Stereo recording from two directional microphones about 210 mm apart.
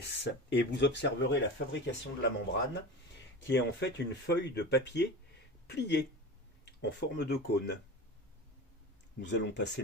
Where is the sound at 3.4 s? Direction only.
55° left (ahead or behind).